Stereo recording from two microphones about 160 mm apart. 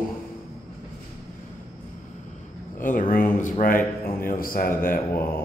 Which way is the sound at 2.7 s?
55° left (ahead or behind).